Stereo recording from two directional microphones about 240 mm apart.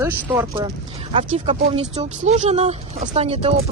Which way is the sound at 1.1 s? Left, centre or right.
Right.